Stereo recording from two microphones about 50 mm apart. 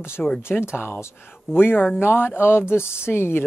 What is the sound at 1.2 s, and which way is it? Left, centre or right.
Speech, left.